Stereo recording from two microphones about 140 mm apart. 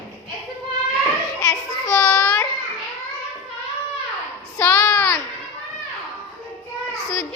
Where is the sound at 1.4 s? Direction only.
20° left (ahead or behind).